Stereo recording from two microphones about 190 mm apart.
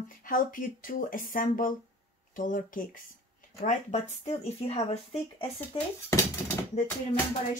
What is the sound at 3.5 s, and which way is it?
Speech, 35° left (ahead or behind).